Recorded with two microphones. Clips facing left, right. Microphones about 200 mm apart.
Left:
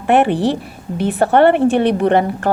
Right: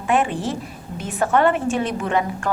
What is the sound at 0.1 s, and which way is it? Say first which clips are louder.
A woman's voice: left 7 dB; 65° left (ahead or behind).